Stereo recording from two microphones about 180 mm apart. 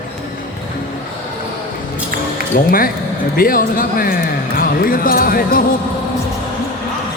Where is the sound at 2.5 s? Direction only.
50° left (ahead or behind).